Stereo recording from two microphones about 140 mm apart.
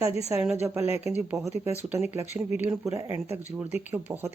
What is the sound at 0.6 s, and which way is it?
Speech, 20° right (ahead or behind).